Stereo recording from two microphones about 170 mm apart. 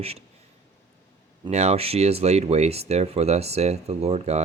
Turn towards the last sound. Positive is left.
turn(degrees=-40)  # may be behind; listen again after turning